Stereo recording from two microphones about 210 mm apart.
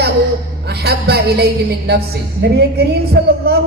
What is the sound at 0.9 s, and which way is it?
Speech, 50° right (ahead or behind).